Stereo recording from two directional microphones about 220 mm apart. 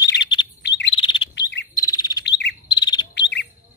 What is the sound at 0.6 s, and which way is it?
Chirp, 50° left (ahead or behind).